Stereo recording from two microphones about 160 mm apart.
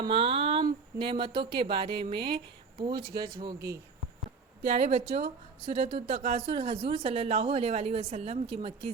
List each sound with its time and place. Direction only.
0.0 s speech: 35° right (ahead or behind)
3.4 s speech: 20° right (ahead or behind)
4.6 s speech: 45° right (ahead or behind)